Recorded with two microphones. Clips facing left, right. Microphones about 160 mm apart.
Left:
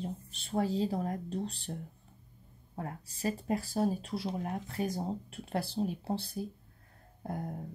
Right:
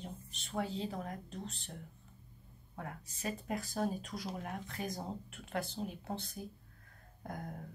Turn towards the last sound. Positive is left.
turn(degrees=30)  # may be behind; listen again after turning